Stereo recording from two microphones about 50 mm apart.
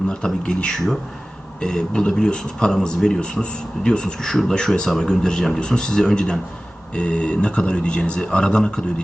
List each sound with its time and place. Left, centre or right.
0.4 s speech: centre